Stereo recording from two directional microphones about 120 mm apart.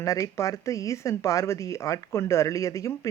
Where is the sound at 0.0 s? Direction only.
25° left (ahead or behind).